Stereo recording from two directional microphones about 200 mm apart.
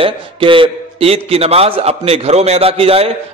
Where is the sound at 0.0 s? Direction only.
25° right (ahead or behind).